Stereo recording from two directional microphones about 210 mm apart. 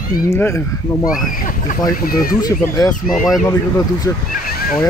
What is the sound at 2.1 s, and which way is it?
Speech, 45° left (ahead or behind).